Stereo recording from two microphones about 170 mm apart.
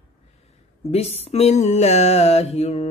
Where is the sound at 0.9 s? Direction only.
35° left (ahead or behind).